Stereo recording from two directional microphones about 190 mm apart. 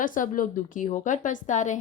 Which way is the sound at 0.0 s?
45° left (ahead or behind).